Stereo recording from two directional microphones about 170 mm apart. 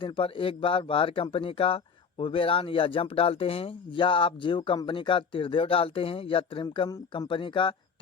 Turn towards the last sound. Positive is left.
turn(degrees=30)  # may be behind; listen again after turning